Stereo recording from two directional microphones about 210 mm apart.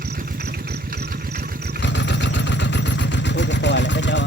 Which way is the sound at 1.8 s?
60° left (ahead or behind).